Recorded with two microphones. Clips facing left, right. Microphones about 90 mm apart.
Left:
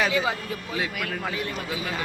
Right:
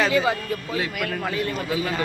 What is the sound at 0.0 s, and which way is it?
Speech, 5° left (ahead or behind).